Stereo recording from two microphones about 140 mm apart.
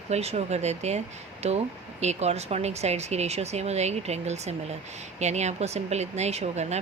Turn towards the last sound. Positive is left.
turn(degrees=-50)  # may be behind; listen again after turning